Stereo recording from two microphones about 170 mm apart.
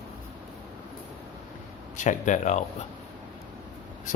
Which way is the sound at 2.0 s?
45° left (ahead or behind).